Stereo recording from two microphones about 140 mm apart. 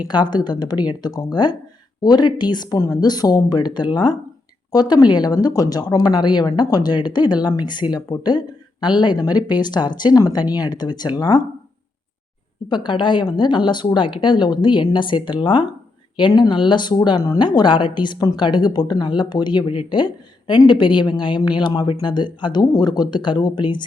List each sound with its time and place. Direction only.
0.1 s speech: 30° left (ahead or behind)
12.6 s speech: 35° left (ahead or behind)